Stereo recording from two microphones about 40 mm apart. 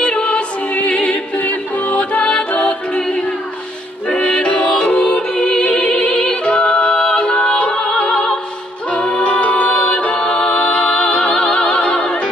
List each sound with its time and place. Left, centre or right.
0.0 s music: left
4.1 s music: left
6.4 s music: left
9.2 s music: left
10.7 s music: left
11.4 s opera: left